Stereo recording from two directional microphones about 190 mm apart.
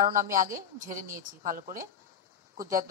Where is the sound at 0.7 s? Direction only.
45° right (ahead or behind).